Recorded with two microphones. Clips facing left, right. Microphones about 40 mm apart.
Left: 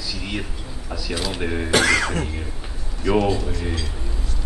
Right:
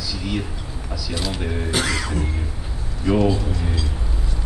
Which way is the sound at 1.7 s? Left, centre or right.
Left.